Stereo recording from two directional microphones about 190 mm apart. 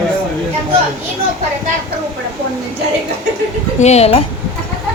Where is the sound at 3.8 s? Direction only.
35° left (ahead or behind).